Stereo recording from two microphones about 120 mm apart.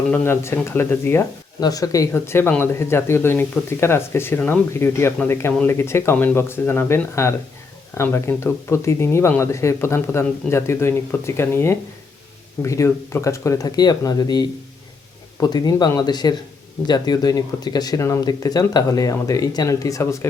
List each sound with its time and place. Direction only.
0.1 s speech: 20° left (ahead or behind)
1.6 s speech: 30° left (ahead or behind)
2.1 s speech: 20° left (ahead or behind)